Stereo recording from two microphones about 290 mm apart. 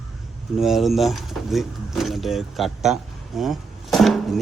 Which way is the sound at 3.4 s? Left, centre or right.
Centre.